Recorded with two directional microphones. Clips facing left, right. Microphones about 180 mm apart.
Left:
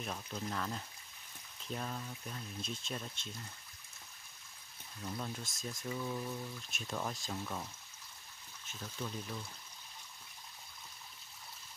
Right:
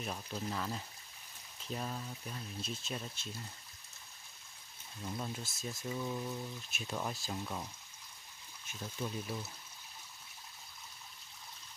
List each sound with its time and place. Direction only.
0.0 s speech: 5° right (ahead or behind)
5.0 s speech: 5° right (ahead or behind)
9.0 s speech: 10° right (ahead or behind)